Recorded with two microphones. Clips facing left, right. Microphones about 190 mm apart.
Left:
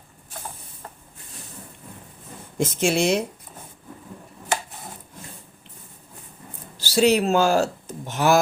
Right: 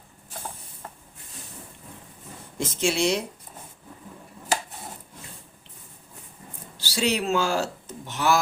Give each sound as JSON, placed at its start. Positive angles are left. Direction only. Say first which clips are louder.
{"t": 2.6, "sound": "speech", "louder": "left 3 dB", "side_deg": 50}
{"t": 6.7, "sound": "speech", "louder": "left 7 dB", "side_deg": 45}